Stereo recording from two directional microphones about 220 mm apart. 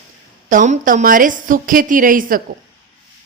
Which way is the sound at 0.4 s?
35° right (ahead or behind).